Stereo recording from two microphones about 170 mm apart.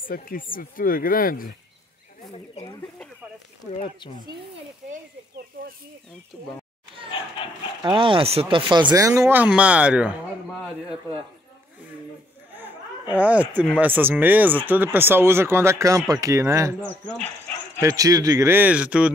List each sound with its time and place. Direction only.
0.0 s speech: 55° left (ahead or behind)
5.5 s speech: 55° right (ahead or behind)
7.4 s dog: 30° left (ahead or behind)
7.8 s speech: 30° right (ahead or behind); by 10.2 s 5° right (ahead or behind)
10.5 s speech: 5° left (ahead or behind)
13.1 s a man's voice: 10° right (ahead or behind)
17.0 s speech: 5° left (ahead or behind)
17.8 s a man's voice: 20° right (ahead or behind)